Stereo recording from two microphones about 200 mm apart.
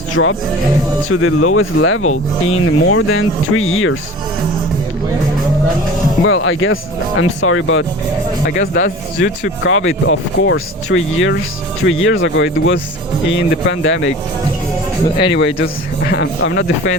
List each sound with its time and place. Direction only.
0.2 s speech: 80° left
6.2 s speech: 85° left
8.4 s speech: 45° left (ahead or behind)
9.6 s speech: 75° left (ahead or behind)
15.2 s speech: 65° left (ahead or behind)